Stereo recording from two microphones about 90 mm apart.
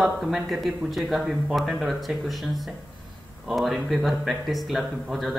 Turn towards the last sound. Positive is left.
turn(degrees=0)  # may be behind; listen again after turning